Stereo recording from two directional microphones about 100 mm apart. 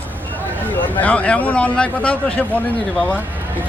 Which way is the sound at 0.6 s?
20° left (ahead or behind).